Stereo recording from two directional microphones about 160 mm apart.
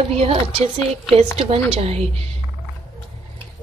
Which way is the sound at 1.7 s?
40° right (ahead or behind).